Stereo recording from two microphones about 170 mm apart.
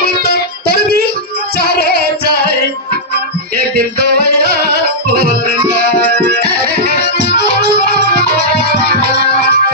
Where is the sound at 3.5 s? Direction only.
65° right (ahead or behind).